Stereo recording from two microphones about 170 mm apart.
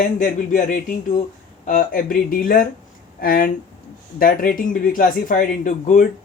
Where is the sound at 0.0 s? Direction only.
50° left (ahead or behind).